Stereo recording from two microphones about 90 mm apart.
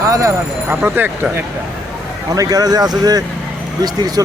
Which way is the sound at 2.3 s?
45° right (ahead or behind).